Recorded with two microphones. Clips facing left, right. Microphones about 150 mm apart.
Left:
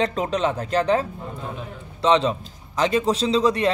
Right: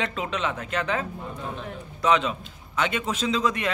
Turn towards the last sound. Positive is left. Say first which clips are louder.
# left 6 dB
turn(degrees=35)  # may be behind; listen again after turning